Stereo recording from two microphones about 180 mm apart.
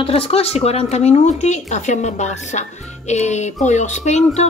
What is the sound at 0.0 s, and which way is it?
Speech, 30° left (ahead or behind).